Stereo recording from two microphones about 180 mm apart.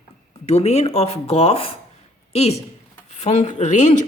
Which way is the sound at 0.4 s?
35° left (ahead or behind).